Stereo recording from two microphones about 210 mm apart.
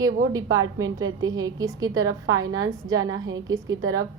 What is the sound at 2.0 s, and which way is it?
Speech, 80° right.